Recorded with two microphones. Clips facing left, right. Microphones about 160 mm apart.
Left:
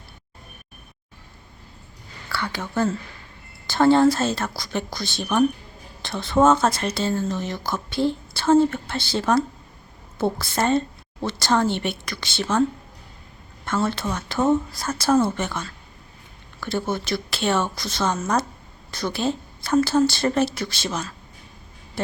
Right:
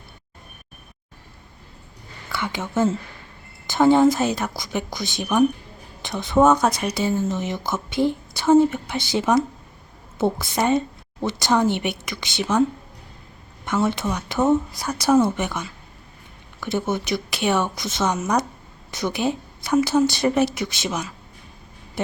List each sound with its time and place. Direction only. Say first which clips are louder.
2.3 s speech: right 2 dB; 20° right (ahead or behind)
13.7 s a woman's voice: right 2 dB; 15° right (ahead or behind)
22.0 s a sound: right 1 dB; 20° right (ahead or behind)